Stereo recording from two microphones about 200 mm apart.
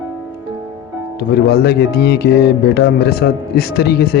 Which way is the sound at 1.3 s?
55° left (ahead or behind).